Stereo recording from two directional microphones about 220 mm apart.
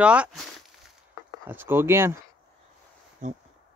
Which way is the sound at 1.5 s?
10° right (ahead or behind).